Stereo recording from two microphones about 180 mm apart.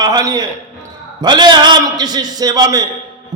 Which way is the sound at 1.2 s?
25° right (ahead or behind).